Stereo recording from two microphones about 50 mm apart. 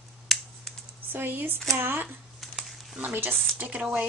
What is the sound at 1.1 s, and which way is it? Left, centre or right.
Speech, right.